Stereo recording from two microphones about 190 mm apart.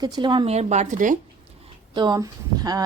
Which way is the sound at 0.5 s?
35° right (ahead or behind).